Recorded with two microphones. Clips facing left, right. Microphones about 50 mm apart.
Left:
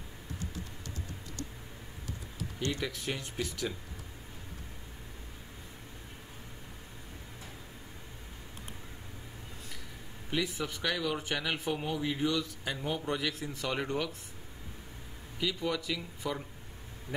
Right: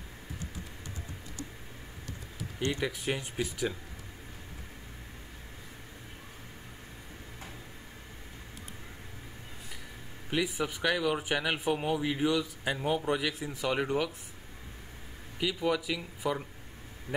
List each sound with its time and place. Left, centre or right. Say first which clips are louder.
2.6 s speech: right 3 dB; centre
10.3 s speech: right 3 dB; centre
15.3 s speech: right 3 dB; centre